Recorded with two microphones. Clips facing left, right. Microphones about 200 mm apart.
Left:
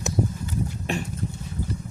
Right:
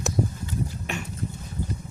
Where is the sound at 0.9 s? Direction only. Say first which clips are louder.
Left 9 dB; 35° left (ahead or behind).